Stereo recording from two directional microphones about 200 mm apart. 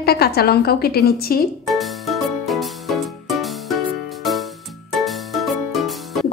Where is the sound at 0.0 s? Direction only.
50° left (ahead or behind).